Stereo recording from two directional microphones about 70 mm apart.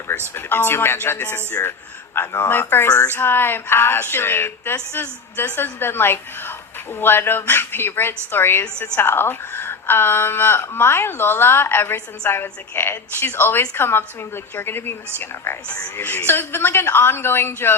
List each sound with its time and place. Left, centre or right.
0.3 s a woman's voice: left